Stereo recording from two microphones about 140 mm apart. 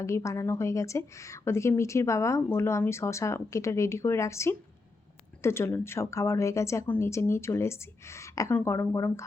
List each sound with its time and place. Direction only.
0.0 s a woman's voice: 20° left (ahead or behind)